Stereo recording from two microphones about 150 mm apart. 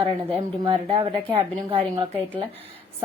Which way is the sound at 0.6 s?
30° right (ahead or behind).